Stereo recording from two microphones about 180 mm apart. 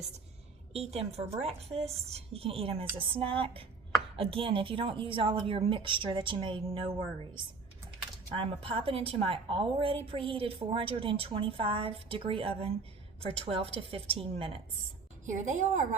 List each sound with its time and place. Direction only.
0.7 s a woman's voice: 35° right (ahead or behind)
15.3 s a woman's voice: 45° right (ahead or behind)